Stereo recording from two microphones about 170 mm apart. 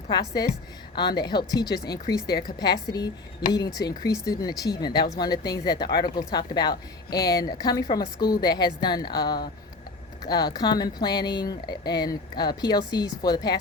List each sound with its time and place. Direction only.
0.1 s speech: 25° left (ahead or behind)